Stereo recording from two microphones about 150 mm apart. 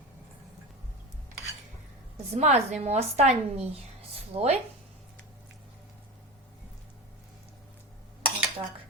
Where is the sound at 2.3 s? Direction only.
45° right (ahead or behind).